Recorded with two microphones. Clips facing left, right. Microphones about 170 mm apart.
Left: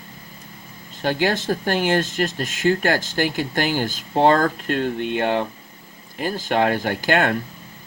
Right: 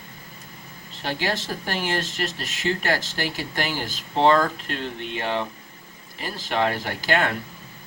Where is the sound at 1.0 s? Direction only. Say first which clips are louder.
Left 6 dB; 50° left (ahead or behind).